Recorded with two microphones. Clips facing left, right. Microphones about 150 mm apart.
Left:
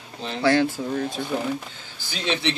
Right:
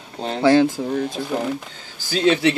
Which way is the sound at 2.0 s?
45° right (ahead or behind).